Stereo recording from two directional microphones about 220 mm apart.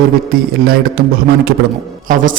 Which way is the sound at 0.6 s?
45° right (ahead or behind).